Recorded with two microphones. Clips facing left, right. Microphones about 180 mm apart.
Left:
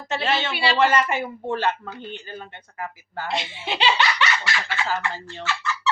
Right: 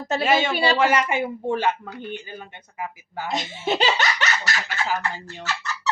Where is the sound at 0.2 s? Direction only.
10° right (ahead or behind).